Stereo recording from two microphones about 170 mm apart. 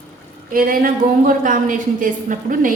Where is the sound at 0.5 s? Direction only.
55° right (ahead or behind).